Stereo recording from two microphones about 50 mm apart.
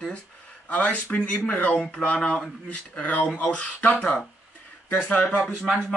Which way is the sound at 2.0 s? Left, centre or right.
Centre.